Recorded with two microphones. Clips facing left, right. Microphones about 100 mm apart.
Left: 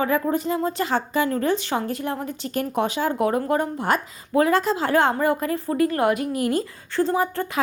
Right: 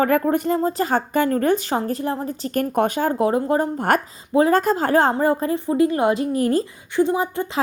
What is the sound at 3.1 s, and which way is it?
Speech, 30° right (ahead or behind).